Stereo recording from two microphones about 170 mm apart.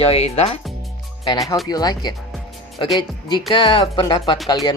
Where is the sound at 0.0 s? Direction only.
35° left (ahead or behind).